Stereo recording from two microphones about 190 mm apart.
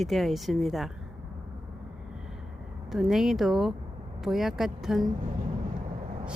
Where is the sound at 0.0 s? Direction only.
Centre (ahead or behind).